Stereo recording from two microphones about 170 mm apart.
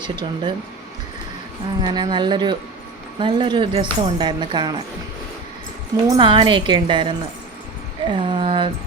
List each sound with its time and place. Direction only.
0.0 s speech: 25° right (ahead or behind)
1.8 s speech: 25° right (ahead or behind)
6.1 s speech: 30° right (ahead or behind)
8.1 s speech: 30° right (ahead or behind)